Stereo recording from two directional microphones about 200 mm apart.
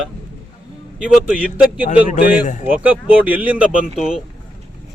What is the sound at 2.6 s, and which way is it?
A man's voice, 10° right (ahead or behind).